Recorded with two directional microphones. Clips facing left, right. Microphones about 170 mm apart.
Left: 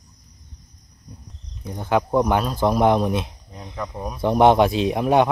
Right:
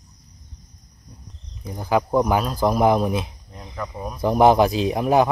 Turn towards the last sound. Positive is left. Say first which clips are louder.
# even
turn(degrees=0)  # may be behind; listen again after turning